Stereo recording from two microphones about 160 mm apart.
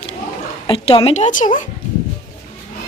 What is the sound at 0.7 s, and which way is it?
Speech, 35° left (ahead or behind).